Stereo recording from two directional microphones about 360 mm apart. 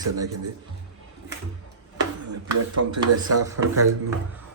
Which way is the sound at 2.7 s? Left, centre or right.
Right.